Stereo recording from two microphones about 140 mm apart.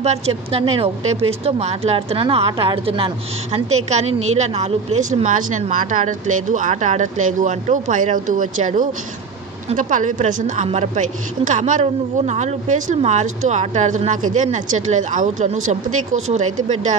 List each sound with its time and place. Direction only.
0.0 s a woman's voice: 50° right (ahead or behind)